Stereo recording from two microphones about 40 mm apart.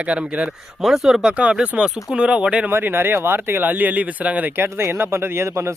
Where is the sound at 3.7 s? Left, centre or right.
Right.